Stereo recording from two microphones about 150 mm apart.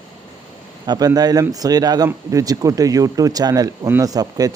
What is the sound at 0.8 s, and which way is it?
Speech, 25° right (ahead or behind).